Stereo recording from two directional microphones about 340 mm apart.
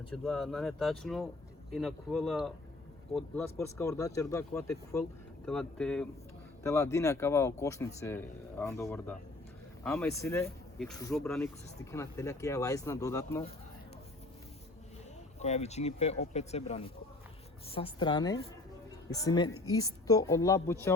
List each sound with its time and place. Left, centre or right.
0.1 s speech: centre
15.4 s speech: centre